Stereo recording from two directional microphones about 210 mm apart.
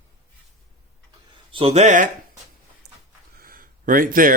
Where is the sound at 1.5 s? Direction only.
25° right (ahead or behind).